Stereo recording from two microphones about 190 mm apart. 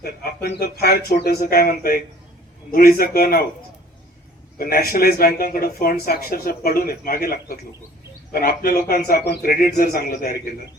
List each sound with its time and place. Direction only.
0.0 s speech: 60° left (ahead or behind)
4.5 s speech: 50° left (ahead or behind)